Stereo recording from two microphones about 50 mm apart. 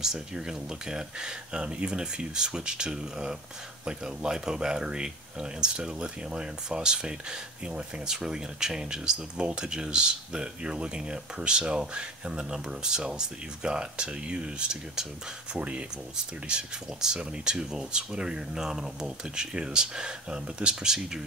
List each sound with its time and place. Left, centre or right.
0.0 s speech: centre